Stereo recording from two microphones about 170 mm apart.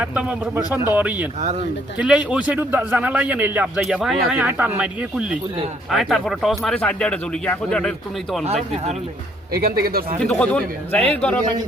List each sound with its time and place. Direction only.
0.0 s a man's voice: 10° right (ahead or behind)
1.4 s speech: 40° right (ahead or behind)
2.0 s a man's voice: 5° right (ahead or behind)
9.6 s speech: 65° right (ahead or behind)
10.2 s speech: 5° left (ahead or behind)